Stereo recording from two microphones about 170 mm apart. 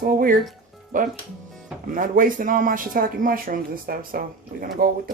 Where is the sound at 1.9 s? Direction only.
55° right (ahead or behind).